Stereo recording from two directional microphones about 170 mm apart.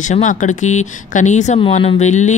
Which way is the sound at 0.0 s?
45° left (ahead or behind).